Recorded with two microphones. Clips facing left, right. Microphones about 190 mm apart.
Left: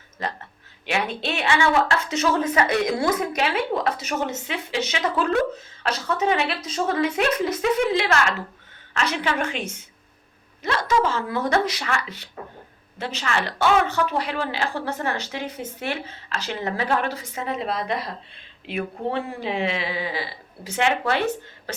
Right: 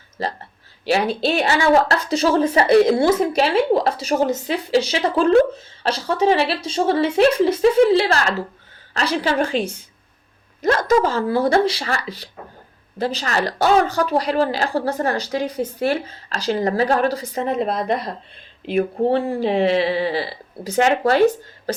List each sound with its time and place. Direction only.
0.2 s a woman's voice: 30° right (ahead or behind)